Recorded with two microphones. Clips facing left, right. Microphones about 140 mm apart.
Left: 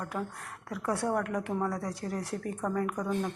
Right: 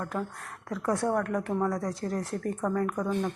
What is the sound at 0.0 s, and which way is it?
Speech, 10° left (ahead or behind).